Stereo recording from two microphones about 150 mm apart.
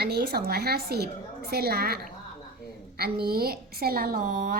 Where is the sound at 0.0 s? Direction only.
90° right.